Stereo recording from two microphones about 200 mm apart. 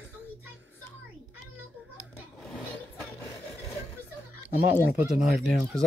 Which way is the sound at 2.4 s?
5° left (ahead or behind).